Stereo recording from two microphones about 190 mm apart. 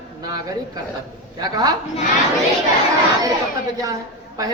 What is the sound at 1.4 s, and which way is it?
Speech, 20° right (ahead or behind).